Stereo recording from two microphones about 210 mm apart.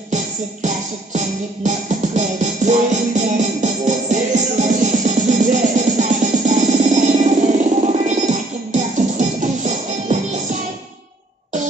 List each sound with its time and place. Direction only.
0.1 s music: 35° right (ahead or behind)